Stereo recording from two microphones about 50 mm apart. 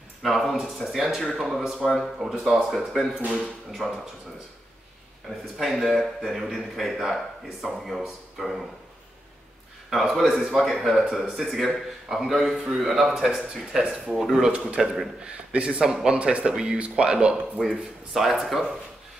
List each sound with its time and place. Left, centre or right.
0.2 s a man's voice: centre
1.6 s a man's voice: centre
3.8 s speech: centre
5.6 s a man's voice: centre
9.8 s a man's voice: centre
10.5 s a man's voice: centre
14.4 s a man's voice: right
17.6 s a man's voice: centre